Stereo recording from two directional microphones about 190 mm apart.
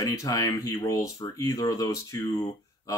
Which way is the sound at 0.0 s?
15° left (ahead or behind).